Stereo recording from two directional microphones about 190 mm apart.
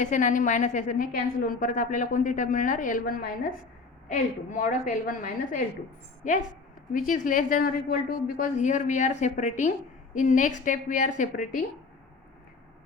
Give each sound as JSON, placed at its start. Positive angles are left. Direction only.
{"t": 0.0, "sound": "a woman's voice", "side_deg": 40}
{"t": 6.9, "sound": "a woman's voice", "side_deg": 45}